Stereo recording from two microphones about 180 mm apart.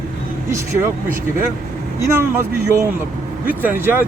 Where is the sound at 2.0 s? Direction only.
15° right (ahead or behind).